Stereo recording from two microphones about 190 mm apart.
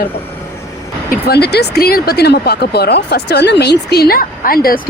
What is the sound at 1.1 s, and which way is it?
Speech, 55° left (ahead or behind).